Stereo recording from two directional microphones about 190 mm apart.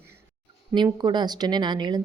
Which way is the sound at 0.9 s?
25° right (ahead or behind).